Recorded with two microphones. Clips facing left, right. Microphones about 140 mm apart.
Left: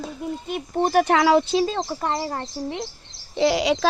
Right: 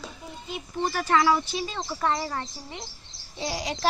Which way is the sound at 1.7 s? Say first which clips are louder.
Left 2 dB; 40° left (ahead or behind).